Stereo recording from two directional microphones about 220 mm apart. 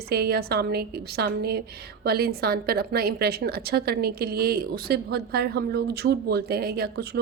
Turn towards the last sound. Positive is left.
turn(degrees=-45)  # may be behind; listen again after turning